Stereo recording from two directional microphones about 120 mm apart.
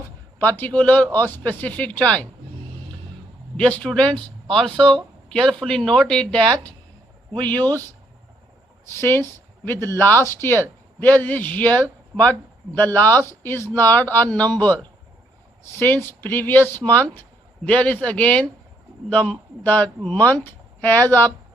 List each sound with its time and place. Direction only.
0.3 s speech: 15° left (ahead or behind)
3.6 s speech: 10° left (ahead or behind)
9.0 s a woman's voice: 20° left (ahead or behind)
9.7 s speech: 25° right (ahead or behind)
10.0 s a man's voice: 20° left (ahead or behind)